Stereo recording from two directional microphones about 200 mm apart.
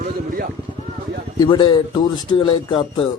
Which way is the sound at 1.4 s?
25° left (ahead or behind).